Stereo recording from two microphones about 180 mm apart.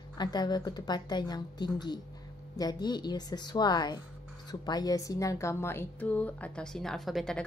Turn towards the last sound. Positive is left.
turn(degrees=0)  # may be behind; listen again after turning